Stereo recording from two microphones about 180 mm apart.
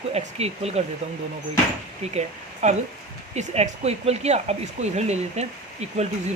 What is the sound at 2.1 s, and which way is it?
Speech, 40° right (ahead or behind).